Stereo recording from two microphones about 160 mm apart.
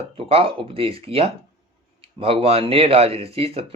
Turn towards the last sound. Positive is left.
turn(degrees=-40)  # may be behind; listen again after turning